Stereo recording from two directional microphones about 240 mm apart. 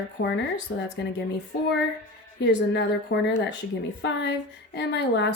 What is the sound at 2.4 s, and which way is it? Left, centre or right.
Speech, left.